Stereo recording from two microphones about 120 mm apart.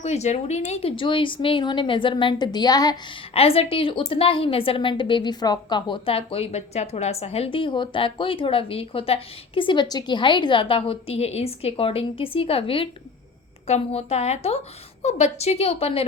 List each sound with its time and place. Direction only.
0.0 s a woman's voice: 70° left (ahead or behind); by 3.2 s 35° left (ahead or behind)
3.3 s a woman's voice: 55° left (ahead or behind)
13.7 s a woman's voice: 60° left (ahead or behind)